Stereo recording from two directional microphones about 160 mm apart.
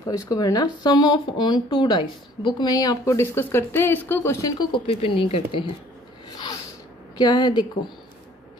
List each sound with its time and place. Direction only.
0.1 s speech: 20° left (ahead or behind)
6.3 s a sound: 25° left (ahead or behind)
7.2 s speech: 25° left (ahead or behind)